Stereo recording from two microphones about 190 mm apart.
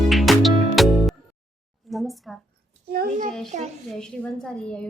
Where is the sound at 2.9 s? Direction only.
50° right (ahead or behind).